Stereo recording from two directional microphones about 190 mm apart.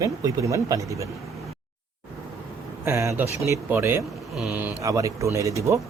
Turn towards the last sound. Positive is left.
turn(degrees=-15)  # may be behind; listen again after turning